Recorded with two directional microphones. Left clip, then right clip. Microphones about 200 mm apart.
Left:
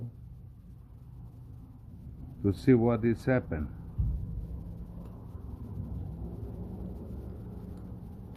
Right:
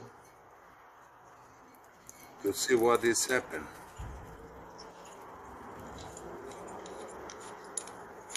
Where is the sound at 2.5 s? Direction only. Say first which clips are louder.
Even; 40° left (ahead or behind).